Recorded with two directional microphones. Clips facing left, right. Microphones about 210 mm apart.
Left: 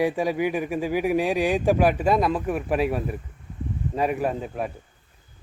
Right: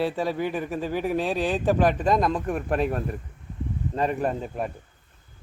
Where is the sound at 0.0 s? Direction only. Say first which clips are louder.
Left 3 dB; 15° left (ahead or behind).